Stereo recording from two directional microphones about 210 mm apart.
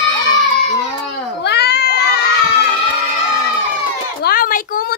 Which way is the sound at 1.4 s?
50° left (ahead or behind).